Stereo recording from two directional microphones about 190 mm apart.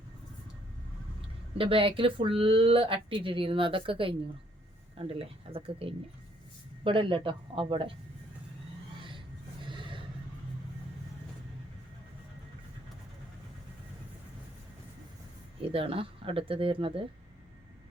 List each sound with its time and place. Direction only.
1.5 s speech: 30° right (ahead or behind)
9.0 s a sound: 25° right (ahead or behind)
9.6 s gasp: 25° right (ahead or behind)
15.7 s speech: 30° right (ahead or behind)